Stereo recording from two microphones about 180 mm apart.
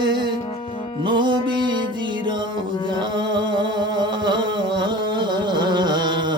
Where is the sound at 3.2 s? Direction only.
25° right (ahead or behind).